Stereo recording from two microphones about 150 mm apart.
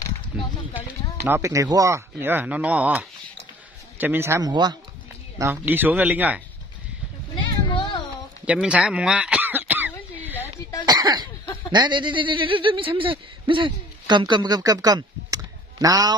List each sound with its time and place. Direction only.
0.3 s a sound: 5° right (ahead or behind)
1.4 s speech: 20° right (ahead or behind)
4.5 s speech: 30° right (ahead or behind)
5.4 s speech: 15° right (ahead or behind)
7.3 s a sound: 30° left (ahead or behind)
8.5 s throat clearing: 5° right (ahead or behind)
10.9 s cough: 25° right (ahead or behind)
11.7 s a man's voice: 30° right (ahead or behind)